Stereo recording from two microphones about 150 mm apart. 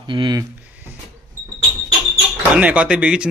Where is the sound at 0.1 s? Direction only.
30° right (ahead or behind).